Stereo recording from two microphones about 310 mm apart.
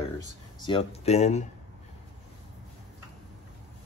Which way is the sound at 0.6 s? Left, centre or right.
Centre.